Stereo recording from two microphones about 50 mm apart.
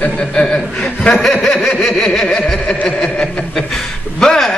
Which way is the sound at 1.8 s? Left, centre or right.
Centre.